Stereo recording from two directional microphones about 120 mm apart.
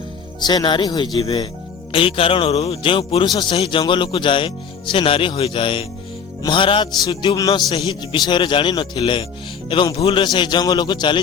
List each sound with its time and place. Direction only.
0.4 s music: 40° left (ahead or behind)
1.9 s speech: 45° left (ahead or behind)
6.4 s music: 45° left (ahead or behind)
7.7 s speech: 40° left (ahead or behind)
10.2 s music: 40° left (ahead or behind)